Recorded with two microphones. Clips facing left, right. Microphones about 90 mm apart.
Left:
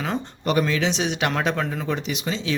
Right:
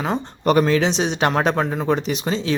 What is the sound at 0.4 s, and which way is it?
Speech, 45° right (ahead or behind).